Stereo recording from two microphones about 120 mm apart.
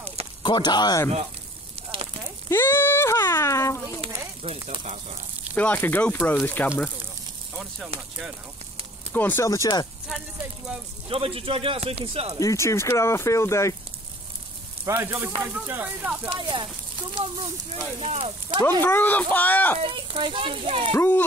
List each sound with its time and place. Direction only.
0.4 s speech: 40° left (ahead or behind)
2.5 s speech: 20° left (ahead or behind)
4.4 s speech: 50° right (ahead or behind)
5.5 s speech: 15° left (ahead or behind)
9.1 s speech: 20° left (ahead or behind)
11.1 s speech: 50° right (ahead or behind)
12.4 s speech: 25° left (ahead or behind)
14.9 s speech: 20° right (ahead or behind)
16.3 s speech: 40° right (ahead or behind)
17.9 s speech: 60° right (ahead or behind)
18.6 s speech: 20° left (ahead or behind)
19.8 s speech: 45° right (ahead or behind)
20.9 s speech: 20° left (ahead or behind)